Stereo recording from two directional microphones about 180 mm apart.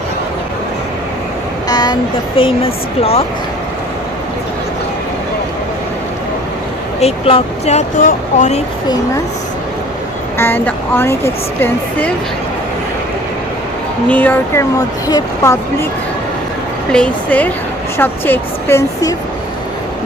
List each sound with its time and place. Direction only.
1.6 s speech: 20° left (ahead or behind)
7.0 s speech: 35° left (ahead or behind)
10.3 s a woman's voice: 10° left (ahead or behind)
14.1 s a woman's voice: 10° left (ahead or behind)
16.9 s a woman's voice: 5° left (ahead or behind)